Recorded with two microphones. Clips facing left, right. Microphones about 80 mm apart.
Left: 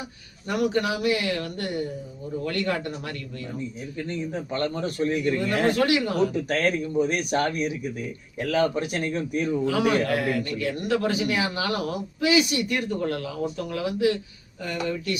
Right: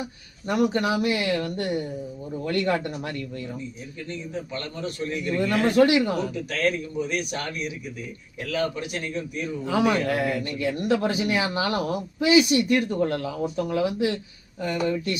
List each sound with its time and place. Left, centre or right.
0.4 s speech: right
3.9 s a man's voice: left
5.7 s speech: right
6.5 s speech: left
9.6 s speech: right